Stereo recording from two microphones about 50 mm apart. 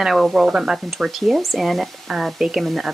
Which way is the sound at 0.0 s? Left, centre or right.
Centre.